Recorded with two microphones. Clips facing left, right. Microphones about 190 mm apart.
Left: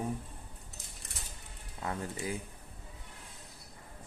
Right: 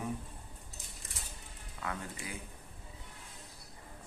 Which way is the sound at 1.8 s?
30° left (ahead or behind).